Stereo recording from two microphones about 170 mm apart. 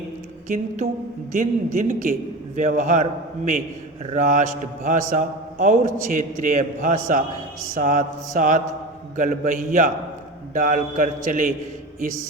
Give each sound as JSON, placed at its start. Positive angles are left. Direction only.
{"t": 0.4, "sound": "a man's voice", "side_deg": -50}